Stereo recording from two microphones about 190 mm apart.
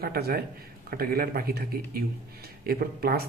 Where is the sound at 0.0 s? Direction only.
55° right (ahead or behind).